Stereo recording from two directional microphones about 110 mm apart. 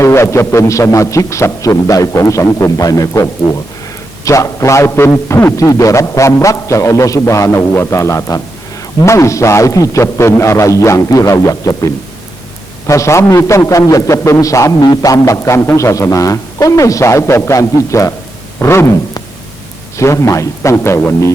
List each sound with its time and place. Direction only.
0.0 s a man's voice: 25° left (ahead or behind)
20.0 s a man's voice: 25° left (ahead or behind)